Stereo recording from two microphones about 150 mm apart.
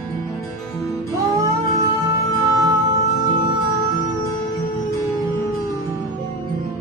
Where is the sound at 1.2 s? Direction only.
20° right (ahead or behind).